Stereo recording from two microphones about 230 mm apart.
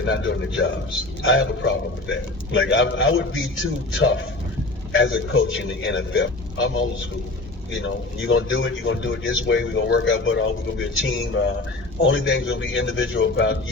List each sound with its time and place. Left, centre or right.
0.0 s a man's voice: left